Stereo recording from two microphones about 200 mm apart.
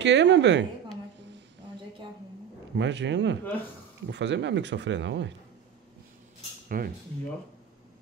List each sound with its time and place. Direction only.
0.0 s speech: 60° right (ahead or behind)
2.7 s speech: 60° right (ahead or behind)
6.7 s speech: 45° right (ahead or behind)